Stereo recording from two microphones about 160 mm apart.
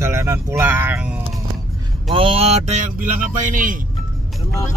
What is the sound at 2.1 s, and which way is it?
Speech, 35° right (ahead or behind).